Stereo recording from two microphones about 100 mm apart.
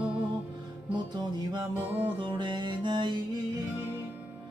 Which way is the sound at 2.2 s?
50° right (ahead or behind).